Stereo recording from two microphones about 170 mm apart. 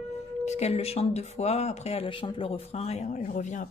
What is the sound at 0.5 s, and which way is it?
Speech, 40° left (ahead or behind).